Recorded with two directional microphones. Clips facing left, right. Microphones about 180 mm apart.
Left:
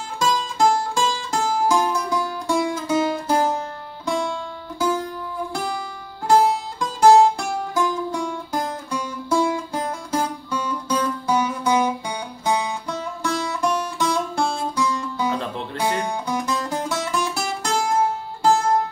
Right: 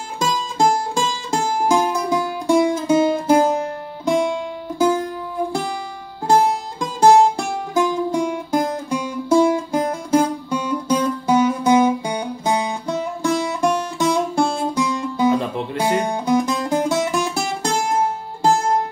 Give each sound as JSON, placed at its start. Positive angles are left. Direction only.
{"t": 0.6, "sound": "music", "side_deg": -20}
{"t": 6.8, "sound": "music", "side_deg": -20}